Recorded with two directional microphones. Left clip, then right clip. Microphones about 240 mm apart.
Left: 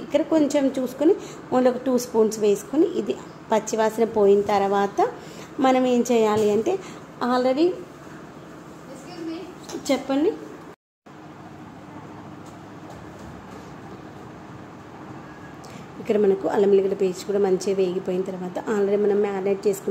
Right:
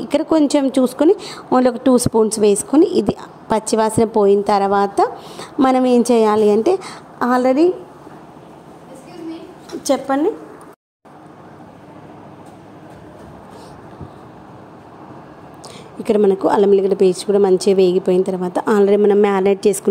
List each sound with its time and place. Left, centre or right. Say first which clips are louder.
0.1 s a woman's voice: right 5 dB; right
9.8 s a woman's voice: right 5 dB; right
16.1 s a woman's voice: right 6 dB; right